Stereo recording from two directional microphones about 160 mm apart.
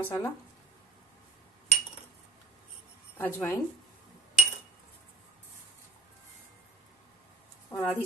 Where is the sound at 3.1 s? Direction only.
10° left (ahead or behind).